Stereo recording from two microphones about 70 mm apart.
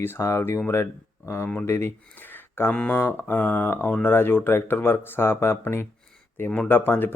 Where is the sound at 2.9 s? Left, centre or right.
Left.